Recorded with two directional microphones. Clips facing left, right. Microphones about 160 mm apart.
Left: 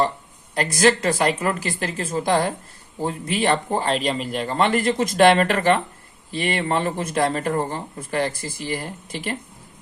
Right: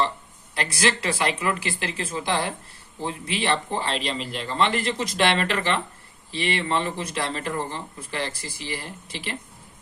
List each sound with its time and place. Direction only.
0.5 s speech: 45° left (ahead or behind)